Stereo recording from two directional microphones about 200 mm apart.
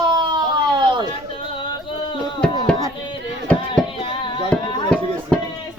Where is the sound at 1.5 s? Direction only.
25° left (ahead or behind).